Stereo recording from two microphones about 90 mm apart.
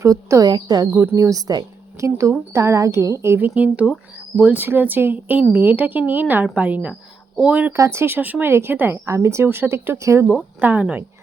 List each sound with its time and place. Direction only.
0.0 s a woman's voice: 40° right (ahead or behind)
0.9 s a woman's voice: 30° right (ahead or behind)
3.4 s speech: 15° right (ahead or behind)
7.7 s speech: 30° right (ahead or behind)
10.2 s speech: 20° right (ahead or behind)